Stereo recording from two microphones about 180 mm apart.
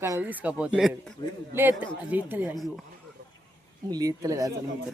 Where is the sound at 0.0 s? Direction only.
10° right (ahead or behind).